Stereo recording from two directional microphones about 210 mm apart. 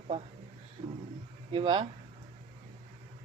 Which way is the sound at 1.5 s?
25° right (ahead or behind).